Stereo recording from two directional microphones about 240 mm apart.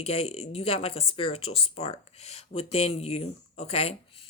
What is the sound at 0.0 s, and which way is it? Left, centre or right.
Speech, left.